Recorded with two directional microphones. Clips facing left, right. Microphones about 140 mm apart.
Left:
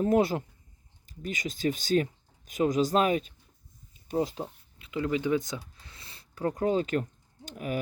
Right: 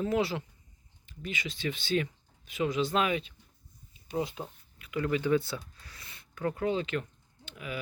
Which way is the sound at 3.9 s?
45° left (ahead or behind).